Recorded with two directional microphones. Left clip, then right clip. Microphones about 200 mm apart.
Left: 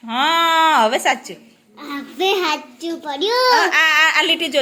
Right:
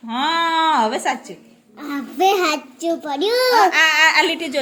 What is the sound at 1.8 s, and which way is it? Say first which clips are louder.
A child's voice: right 3 dB; 60° right (ahead or behind).